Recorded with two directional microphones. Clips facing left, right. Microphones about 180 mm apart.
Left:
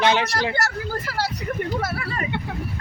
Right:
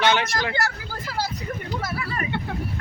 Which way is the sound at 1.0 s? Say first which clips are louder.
Right 2 dB; 70° left (ahead or behind).